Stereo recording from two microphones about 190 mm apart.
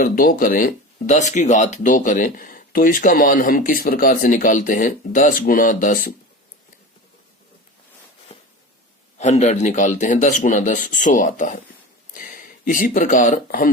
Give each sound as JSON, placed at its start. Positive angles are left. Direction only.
{"t": 0.0, "sound": "speech", "side_deg": 50}
{"t": 8.3, "sound": "a sound", "side_deg": 30}
{"t": 9.1, "sound": "speech", "side_deg": 40}